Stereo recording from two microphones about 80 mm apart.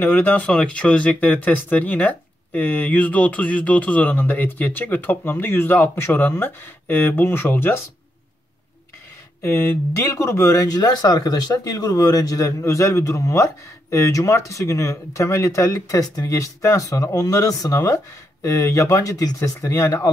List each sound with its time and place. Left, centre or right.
0.0 s speech: left
9.4 s speech: left